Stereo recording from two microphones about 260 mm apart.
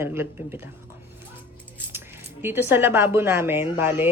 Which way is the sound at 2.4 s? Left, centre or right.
Centre.